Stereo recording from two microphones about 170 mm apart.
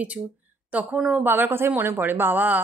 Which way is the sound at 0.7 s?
5° right (ahead or behind).